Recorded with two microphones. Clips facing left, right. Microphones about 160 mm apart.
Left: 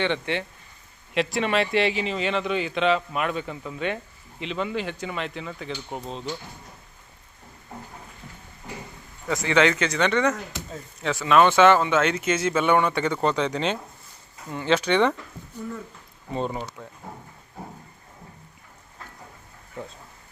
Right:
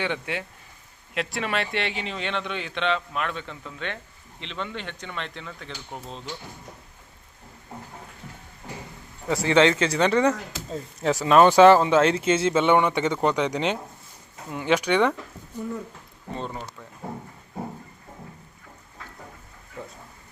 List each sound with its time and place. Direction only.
0.0 s a man's voice: 5° right (ahead or behind)
9.3 s speech: 30° right (ahead or behind); by 15.1 s 10° right (ahead or behind)
16.3 s speech: 15° left (ahead or behind)